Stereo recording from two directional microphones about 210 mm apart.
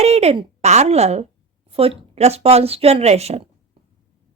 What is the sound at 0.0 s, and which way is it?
A woman's voice, 30° right (ahead or behind).